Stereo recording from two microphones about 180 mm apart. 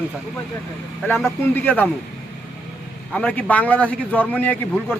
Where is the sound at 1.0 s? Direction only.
10° left (ahead or behind).